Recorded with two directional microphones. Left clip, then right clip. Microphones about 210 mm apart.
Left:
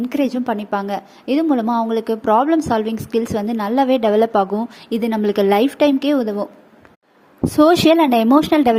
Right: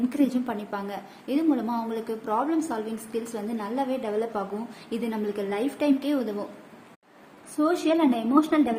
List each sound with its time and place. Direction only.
0.1 s a woman's voice: 40° left (ahead or behind)
7.5 s speech: 50° left (ahead or behind)